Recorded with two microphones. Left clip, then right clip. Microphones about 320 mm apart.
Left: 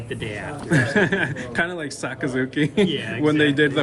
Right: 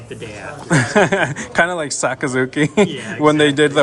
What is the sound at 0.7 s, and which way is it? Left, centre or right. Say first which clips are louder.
A man's voice: right 5 dB; centre.